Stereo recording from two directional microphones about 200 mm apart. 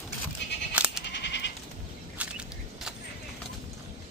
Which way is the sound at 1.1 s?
60° left (ahead or behind).